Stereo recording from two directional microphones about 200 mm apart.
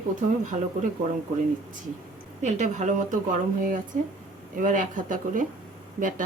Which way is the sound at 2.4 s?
35° right (ahead or behind).